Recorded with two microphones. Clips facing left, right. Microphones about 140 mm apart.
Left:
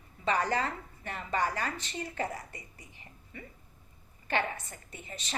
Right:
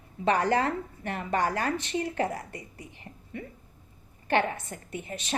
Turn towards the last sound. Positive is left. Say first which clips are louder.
# right 8 dB
turn(degrees=-55)  # may be behind; listen again after turning